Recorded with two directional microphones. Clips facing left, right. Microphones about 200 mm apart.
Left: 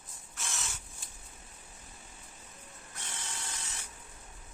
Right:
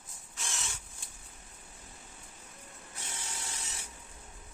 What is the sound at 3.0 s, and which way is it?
Drill, 10° right (ahead or behind).